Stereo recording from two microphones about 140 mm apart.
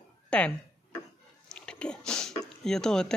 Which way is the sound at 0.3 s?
5° left (ahead or behind).